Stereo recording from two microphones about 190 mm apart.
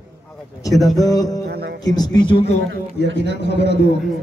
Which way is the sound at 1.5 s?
55° right (ahead or behind).